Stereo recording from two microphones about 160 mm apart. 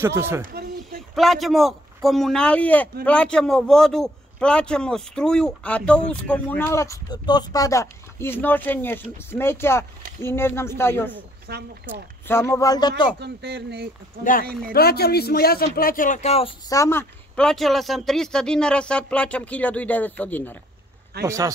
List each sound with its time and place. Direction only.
0.0 s speech: 15° right (ahead or behind)
0.4 s a sound: 70° right (ahead or behind)
1.1 s a man's voice: centre (ahead or behind)
11.5 s speech: 90° right
12.3 s speech: 15° left (ahead or behind)
13.2 s speech: 90° right
14.7 s speech: 75° left (ahead or behind); by 16.5 s 40° left (ahead or behind)
16.6 s speech: 20° left (ahead or behind)
17.4 s a man's voice: 5° left (ahead or behind)
21.2 s speech: 20° right (ahead or behind)